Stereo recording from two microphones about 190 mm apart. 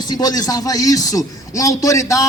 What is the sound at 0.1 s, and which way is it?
A man's voice, 20° left (ahead or behind).